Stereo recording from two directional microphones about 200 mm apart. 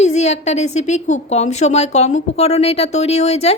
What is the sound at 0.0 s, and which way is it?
A woman's voice, 35° left (ahead or behind).